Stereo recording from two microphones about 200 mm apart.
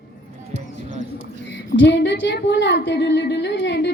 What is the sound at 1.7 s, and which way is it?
A woman's voice, 60° left (ahead or behind).